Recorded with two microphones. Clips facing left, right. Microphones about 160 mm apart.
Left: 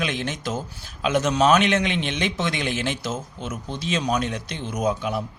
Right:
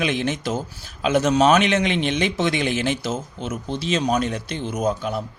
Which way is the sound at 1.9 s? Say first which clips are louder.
Right 4 dB; 50° right (ahead or behind).